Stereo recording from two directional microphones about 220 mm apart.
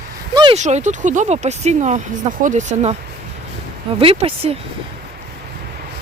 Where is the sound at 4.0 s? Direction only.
25° right (ahead or behind).